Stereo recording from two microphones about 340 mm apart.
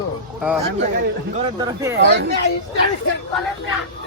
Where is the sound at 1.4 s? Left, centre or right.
Centre.